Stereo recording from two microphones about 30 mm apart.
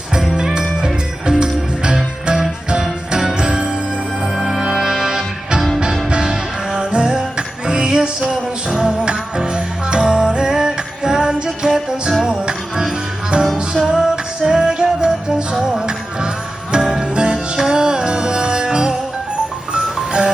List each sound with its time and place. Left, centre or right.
0.3 s music: right
3.1 s music: centre
4.2 s music: centre; by 8.3 s right
9.6 s music: right
13.7 s music: centre
14.4 s music: right
16.7 s jingle bell: right
17.2 s music: right